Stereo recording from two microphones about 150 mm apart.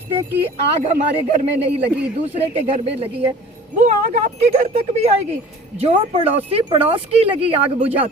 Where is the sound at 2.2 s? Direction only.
40° right (ahead or behind).